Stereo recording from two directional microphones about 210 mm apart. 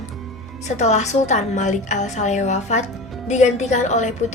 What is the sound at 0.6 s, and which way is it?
A woman's voice, 35° left (ahead or behind).